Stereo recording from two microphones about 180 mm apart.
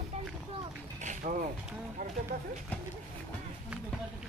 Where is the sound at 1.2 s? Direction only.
45° right (ahead or behind).